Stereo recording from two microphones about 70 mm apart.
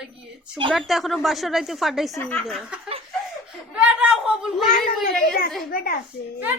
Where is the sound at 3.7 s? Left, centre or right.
Centre.